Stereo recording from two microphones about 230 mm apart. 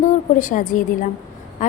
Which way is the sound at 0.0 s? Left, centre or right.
Left.